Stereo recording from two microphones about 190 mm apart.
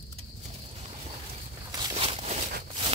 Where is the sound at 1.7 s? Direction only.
20° right (ahead or behind).